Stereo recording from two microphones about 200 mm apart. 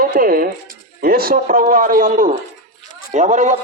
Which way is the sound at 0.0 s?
45° right (ahead or behind).